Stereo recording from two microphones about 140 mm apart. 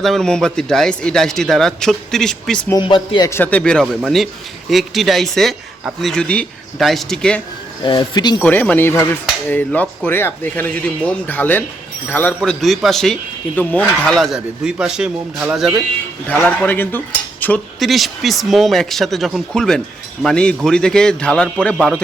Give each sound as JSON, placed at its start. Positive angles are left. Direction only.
{"t": 0.0, "sound": "speech", "side_deg": 5}
{"t": 2.7, "sound": "a man's voice", "side_deg": 35}
{"t": 3.2, "sound": "a man's voice", "side_deg": 15}
{"t": 7.9, "sound": "a man's voice", "side_deg": 35}
{"t": 8.4, "sound": "a man's voice", "side_deg": 10}
{"t": 12.4, "sound": "speech", "side_deg": 0}
{"t": 16.3, "sound": "a man's voice", "side_deg": 10}
{"t": 17.7, "sound": "a man's voice", "side_deg": 0}